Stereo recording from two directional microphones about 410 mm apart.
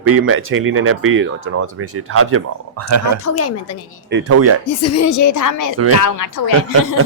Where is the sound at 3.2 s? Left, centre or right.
Left.